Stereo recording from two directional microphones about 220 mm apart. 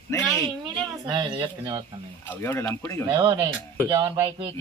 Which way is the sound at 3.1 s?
20° right (ahead or behind).